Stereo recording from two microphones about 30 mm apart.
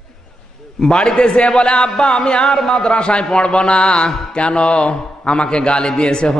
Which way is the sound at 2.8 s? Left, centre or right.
Left.